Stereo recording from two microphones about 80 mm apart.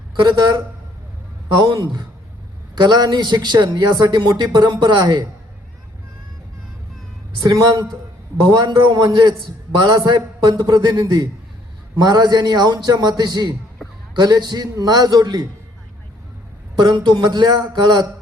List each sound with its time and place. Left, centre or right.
0.2 s a man's voice: right
1.5 s a man's voice: right
7.4 s a man's voice: right
8.4 s a man's voice: right
16.7 s a man's voice: right